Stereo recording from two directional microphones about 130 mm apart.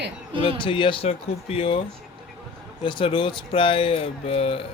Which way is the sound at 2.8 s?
40° left (ahead or behind).